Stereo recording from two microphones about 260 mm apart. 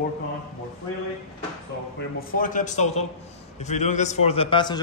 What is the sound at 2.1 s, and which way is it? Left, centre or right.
A man's voice, left.